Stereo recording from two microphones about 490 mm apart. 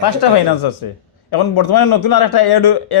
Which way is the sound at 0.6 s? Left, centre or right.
Left.